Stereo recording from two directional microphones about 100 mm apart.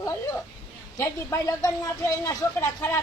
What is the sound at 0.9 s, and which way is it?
Speech, 30° left (ahead or behind).